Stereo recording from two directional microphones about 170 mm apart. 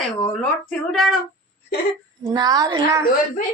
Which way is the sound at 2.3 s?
20° right (ahead or behind).